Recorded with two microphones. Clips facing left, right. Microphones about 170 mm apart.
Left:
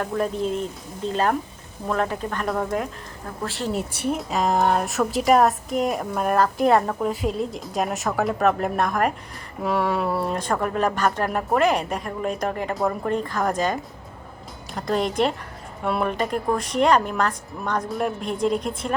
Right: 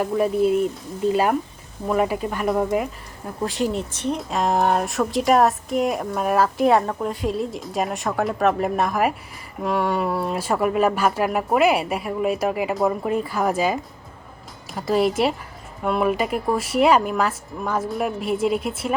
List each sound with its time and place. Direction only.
0.0 s speech: 10° right (ahead or behind)
3.7 s a woman's voice: 5° left (ahead or behind)